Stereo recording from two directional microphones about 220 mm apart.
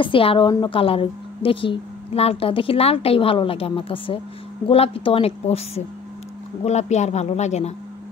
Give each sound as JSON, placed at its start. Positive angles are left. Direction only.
{"t": 0.0, "sound": "a woman's voice", "side_deg": 25}